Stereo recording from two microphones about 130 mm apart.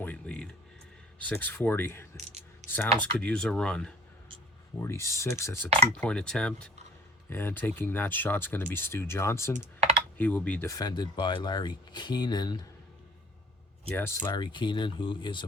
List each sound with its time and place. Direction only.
0.0 s music: 10° left (ahead or behind)
1.2 s speech: 10° left (ahead or behind)
4.8 s speech: 20° left (ahead or behind)
5.9 s speech: 10° left (ahead or behind)
10.7 s speech: 30° left (ahead or behind)
13.9 s speech: 15° left (ahead or behind)
14.3 s speech: 35° left (ahead or behind)